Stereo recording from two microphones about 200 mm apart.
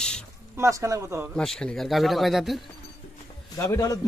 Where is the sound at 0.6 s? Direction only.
15° right (ahead or behind).